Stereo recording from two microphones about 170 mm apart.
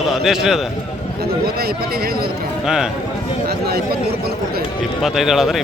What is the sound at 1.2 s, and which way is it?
A man's voice, 65° right (ahead or behind).